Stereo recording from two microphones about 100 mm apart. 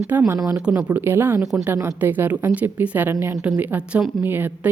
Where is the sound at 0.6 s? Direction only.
10° right (ahead or behind).